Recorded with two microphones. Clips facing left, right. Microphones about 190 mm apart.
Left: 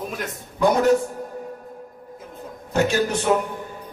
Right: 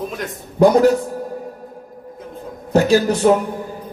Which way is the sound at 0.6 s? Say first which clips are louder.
Right 5 dB; 40° right (ahead or behind).